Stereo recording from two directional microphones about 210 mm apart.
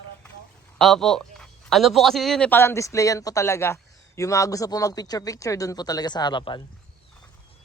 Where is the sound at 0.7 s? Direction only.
Centre (ahead or behind); by 6.6 s 20° left (ahead or behind).